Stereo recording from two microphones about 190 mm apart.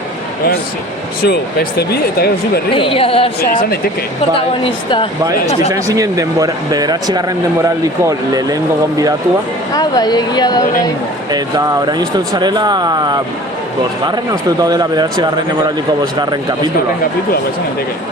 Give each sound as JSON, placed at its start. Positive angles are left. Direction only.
{"t": 1.2, "sound": "speech", "side_deg": 60}
{"t": 2.7, "sound": "a woman's voice", "side_deg": 30}
{"t": 4.6, "sound": "a woman's voice", "side_deg": 25}
{"t": 5.7, "sound": "speech", "side_deg": -20}
{"t": 9.7, "sound": "a woman's voice", "side_deg": 20}
{"t": 11.3, "sound": "speech", "side_deg": -20}
{"t": 14.6, "sound": "speech", "side_deg": -20}